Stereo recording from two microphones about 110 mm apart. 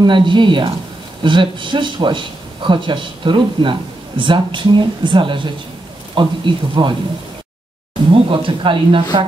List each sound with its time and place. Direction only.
0.0 s speech: 45° right (ahead or behind)
8.1 s speech: 50° right (ahead or behind)